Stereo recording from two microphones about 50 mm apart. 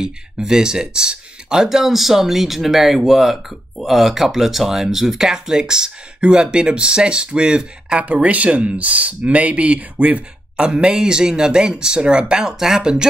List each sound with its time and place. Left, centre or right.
0.0 s speech: centre
8.0 s speech: right; by 13.0 s centre